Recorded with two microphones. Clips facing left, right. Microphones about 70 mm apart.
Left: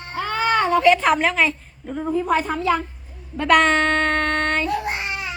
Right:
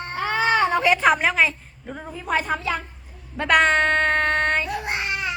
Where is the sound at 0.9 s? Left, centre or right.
Centre.